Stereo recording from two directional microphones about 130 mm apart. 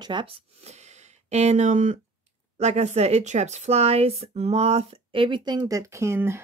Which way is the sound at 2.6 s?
55° right (ahead or behind).